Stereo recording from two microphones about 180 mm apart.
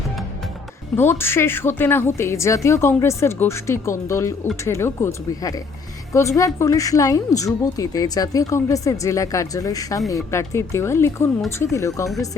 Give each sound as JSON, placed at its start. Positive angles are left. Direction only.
{"t": 0.9, "sound": "a woman's voice", "side_deg": 10}